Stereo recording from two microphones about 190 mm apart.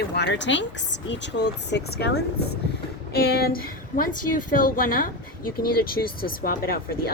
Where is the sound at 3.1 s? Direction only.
55° left (ahead or behind).